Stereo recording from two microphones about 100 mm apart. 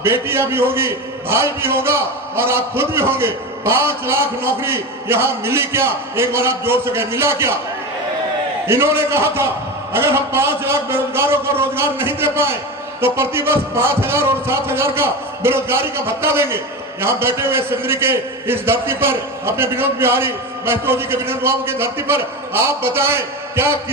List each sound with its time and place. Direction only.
0.0 s a man's voice: 25° right (ahead or behind)
8.6 s a man's voice: 25° right (ahead or behind)